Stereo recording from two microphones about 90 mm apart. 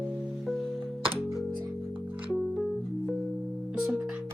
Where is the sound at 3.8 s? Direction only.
10° right (ahead or behind).